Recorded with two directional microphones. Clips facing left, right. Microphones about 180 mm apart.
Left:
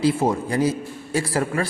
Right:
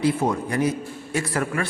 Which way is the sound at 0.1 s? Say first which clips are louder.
Left 2 dB; 25° left (ahead or behind).